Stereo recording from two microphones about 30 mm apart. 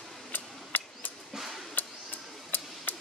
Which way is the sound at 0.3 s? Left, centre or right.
Left.